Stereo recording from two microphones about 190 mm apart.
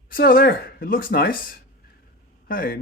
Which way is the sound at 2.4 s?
50° left (ahead or behind).